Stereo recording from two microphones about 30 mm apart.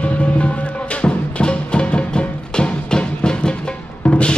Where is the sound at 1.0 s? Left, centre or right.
Left.